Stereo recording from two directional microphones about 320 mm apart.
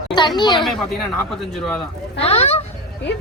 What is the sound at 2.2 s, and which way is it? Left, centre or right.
Speech, centre.